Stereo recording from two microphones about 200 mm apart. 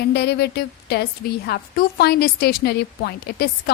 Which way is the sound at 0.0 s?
55° left (ahead or behind).